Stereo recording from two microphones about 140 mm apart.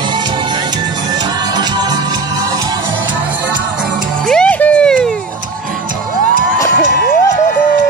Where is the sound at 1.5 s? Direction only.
30° right (ahead or behind).